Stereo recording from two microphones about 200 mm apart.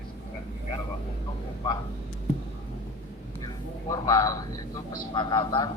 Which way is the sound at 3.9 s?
15° left (ahead or behind).